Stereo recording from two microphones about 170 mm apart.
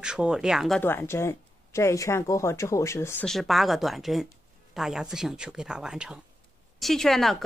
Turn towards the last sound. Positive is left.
turn(degrees=0)  # may be behind; listen again after turning